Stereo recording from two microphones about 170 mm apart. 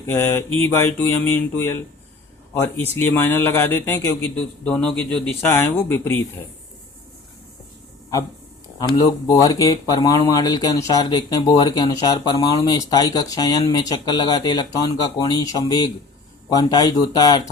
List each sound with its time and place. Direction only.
0.0 s a man's voice: 15° left (ahead or behind)
8.8 s speech: 20° left (ahead or behind)